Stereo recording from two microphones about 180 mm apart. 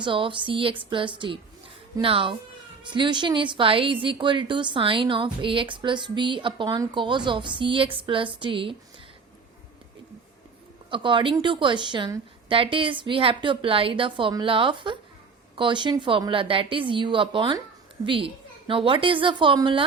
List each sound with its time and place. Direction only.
0.0 s a woman's voice: 30° right (ahead or behind)
10.9 s a woman's voice: 30° right (ahead or behind)